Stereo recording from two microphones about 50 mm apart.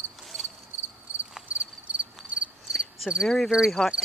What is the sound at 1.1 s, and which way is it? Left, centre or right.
Cricket, right.